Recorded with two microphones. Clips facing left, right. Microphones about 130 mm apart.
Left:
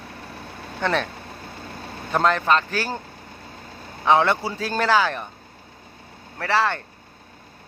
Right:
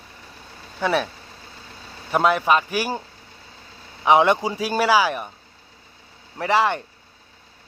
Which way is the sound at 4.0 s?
15° right (ahead or behind).